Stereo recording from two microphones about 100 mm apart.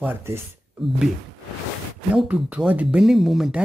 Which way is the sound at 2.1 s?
10° right (ahead or behind).